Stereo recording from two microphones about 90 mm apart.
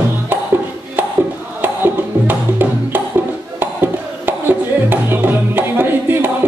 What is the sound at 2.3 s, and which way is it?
Music, 20° right (ahead or behind).